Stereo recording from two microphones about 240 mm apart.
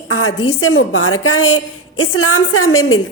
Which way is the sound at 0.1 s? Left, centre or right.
Left.